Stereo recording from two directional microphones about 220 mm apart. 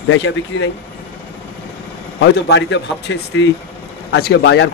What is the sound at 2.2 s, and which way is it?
A man's voice, 50° left (ahead or behind).